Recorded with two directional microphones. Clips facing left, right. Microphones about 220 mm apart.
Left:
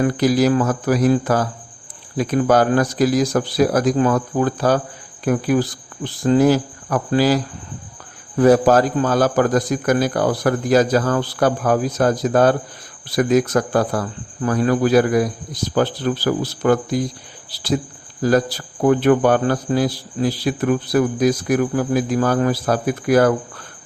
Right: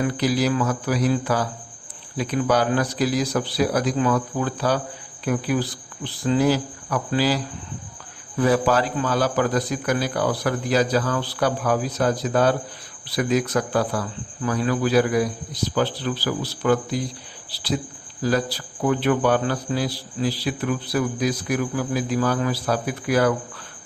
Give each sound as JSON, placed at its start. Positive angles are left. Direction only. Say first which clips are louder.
{"t": 0.0, "sound": "a man's voice", "louder": "left 6 dB", "side_deg": 45}